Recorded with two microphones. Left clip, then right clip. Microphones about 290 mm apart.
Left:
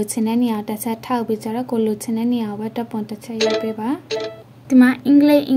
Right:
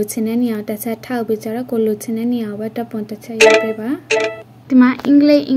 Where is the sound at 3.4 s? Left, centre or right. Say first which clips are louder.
Right 9 dB; centre.